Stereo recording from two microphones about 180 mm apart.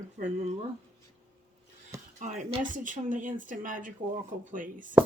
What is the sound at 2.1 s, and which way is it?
Speech, 40° right (ahead or behind).